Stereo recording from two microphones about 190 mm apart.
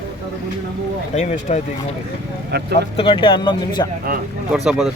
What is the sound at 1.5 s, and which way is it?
Speech, 40° left (ahead or behind).